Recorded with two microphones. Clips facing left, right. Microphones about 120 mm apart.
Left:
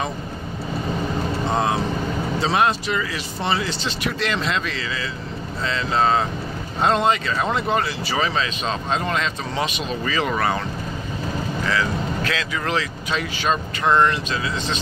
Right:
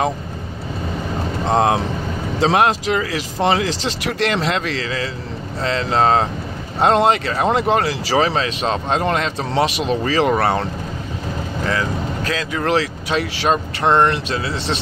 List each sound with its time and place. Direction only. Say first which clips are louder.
1.5 s speech: right 6 dB; 70° right (ahead or behind)
12.3 s speech: right 3 dB; 40° right (ahead or behind)
12.6 s speech: right 8 dB; 65° right (ahead or behind)